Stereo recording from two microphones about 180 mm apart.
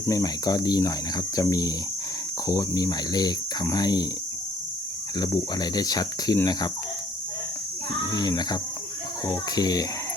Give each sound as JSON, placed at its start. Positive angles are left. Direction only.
{"t": 0.1, "sound": "speech", "side_deg": 20}
{"t": 5.1, "sound": "speech", "side_deg": 20}
{"t": 8.1, "sound": "speech", "side_deg": 20}